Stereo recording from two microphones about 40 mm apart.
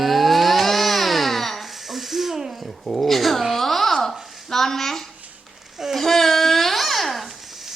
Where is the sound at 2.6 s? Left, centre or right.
Centre.